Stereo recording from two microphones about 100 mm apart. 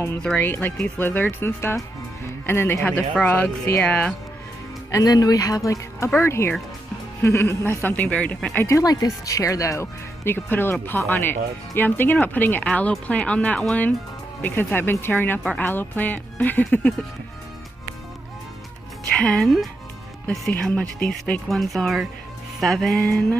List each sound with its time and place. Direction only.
0.4 s speech: 20° left (ahead or behind)
4.9 s speech: 40° left (ahead or behind); by 8.6 s 15° left (ahead or behind)
8.6 s speech: 35° left (ahead or behind); by 16.9 s 15° left (ahead or behind)
19.1 s speech: 5° left (ahead or behind)
20.2 s speech: 10° left (ahead or behind)